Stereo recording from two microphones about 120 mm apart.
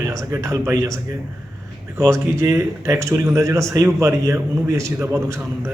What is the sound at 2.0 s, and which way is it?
A man's voice, 25° right (ahead or behind).